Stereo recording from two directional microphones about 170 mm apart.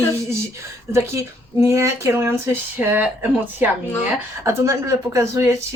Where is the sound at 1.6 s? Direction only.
15° right (ahead or behind).